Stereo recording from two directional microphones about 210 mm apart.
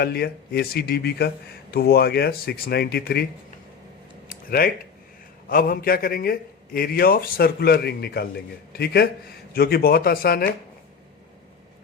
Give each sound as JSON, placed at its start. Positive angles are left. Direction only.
{"t": 0.0, "sound": "a man's voice", "side_deg": 50}
{"t": 4.3, "sound": "a sound", "side_deg": 45}
{"t": 5.5, "sound": "a man's voice", "side_deg": 45}